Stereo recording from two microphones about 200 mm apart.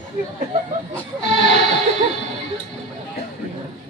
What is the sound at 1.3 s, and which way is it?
Music, 60° left (ahead or behind).